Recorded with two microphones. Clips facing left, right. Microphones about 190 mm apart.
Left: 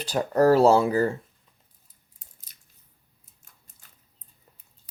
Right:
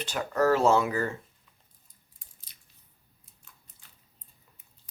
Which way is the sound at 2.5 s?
45° left (ahead or behind).